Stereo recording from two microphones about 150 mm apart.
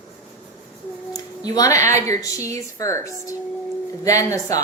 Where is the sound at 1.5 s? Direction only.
20° left (ahead or behind).